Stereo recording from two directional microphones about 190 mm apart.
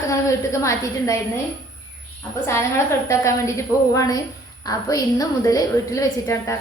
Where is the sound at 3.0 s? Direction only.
15° left (ahead or behind).